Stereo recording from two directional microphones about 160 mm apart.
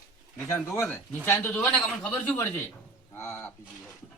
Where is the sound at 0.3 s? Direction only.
15° left (ahead or behind).